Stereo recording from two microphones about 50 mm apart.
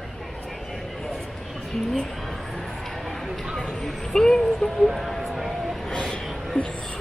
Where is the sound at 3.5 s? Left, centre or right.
Centre.